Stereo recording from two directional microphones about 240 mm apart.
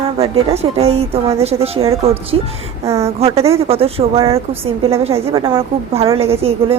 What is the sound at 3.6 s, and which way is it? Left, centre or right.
A woman's voice, right.